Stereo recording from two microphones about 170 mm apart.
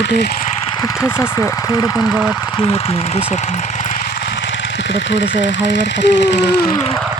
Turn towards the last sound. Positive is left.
turn(degrees=85)